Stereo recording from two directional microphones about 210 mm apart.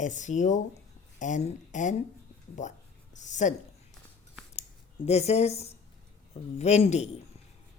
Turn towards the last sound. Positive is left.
turn(degrees=30)  # may be behind; listen again after turning